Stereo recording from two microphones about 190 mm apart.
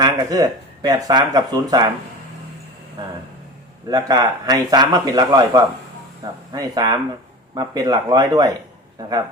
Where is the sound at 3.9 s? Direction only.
20° right (ahead or behind).